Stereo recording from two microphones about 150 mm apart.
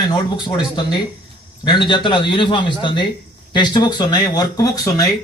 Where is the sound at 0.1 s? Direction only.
30° left (ahead or behind).